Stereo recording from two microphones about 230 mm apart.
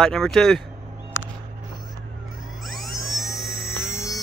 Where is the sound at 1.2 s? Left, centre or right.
Left.